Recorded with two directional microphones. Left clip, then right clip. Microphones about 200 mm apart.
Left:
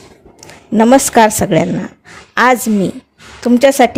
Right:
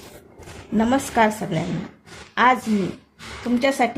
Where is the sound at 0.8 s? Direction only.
50° left (ahead or behind).